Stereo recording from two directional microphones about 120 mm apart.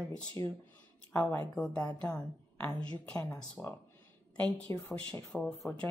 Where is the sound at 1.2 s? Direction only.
5° left (ahead or behind).